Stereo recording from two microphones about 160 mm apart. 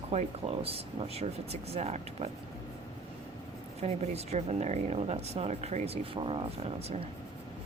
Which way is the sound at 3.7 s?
40° right (ahead or behind).